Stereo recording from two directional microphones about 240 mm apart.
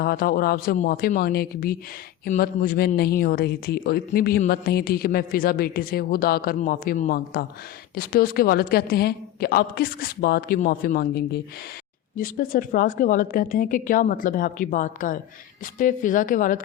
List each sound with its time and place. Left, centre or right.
0.0 s speech: left